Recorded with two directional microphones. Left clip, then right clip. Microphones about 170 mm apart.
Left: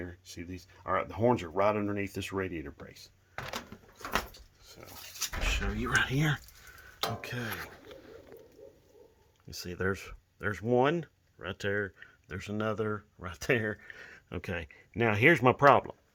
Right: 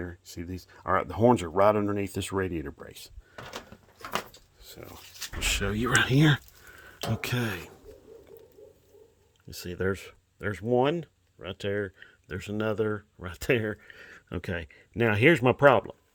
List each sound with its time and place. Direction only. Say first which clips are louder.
0.0 s speech: right 4 dB; 35° right (ahead or behind); by 3.1 s 55° right (ahead or behind)
4.8 s dog: right 3 dB; 90° right
5.4 s speech: right 7 dB; 90° right; by 7.5 s 70° right (ahead or behind)
9.5 s speech: right 3 dB; 25° right (ahead or behind)
11.9 s speech: right 4 dB; 30° right (ahead or behind)
13.8 s a sound: left 1 dB; 10° right (ahead or behind)
14.1 s speech: right 4 dB; 25° right (ahead or behind)